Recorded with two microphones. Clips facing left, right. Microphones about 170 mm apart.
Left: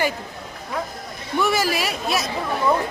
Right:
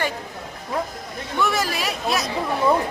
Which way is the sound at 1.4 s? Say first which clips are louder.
Left 2 dB; 5° left (ahead or behind).